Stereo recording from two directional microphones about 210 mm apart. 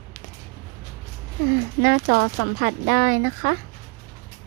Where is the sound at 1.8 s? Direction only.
60° right (ahead or behind).